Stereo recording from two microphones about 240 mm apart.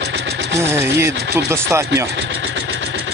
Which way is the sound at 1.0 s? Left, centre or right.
Centre.